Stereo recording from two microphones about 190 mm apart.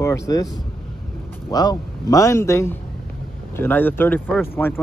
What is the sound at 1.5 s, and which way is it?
Speech, 20° left (ahead or behind).